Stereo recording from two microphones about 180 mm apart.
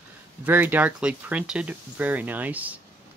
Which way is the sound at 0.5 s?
10° right (ahead or behind).